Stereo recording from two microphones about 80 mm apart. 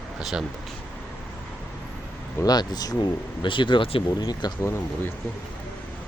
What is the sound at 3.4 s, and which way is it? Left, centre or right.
Speech, left.